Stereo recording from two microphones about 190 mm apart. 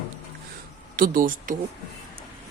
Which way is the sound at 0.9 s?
45° right (ahead or behind).